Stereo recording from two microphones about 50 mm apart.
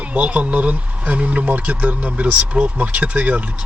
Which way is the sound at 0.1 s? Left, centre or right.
Right.